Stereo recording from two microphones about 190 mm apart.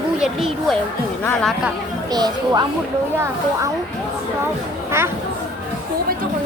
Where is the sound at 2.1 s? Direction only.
20° right (ahead or behind).